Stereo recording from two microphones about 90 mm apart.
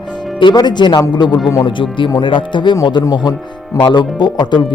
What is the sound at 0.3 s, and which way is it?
Speech, 55° left (ahead or behind).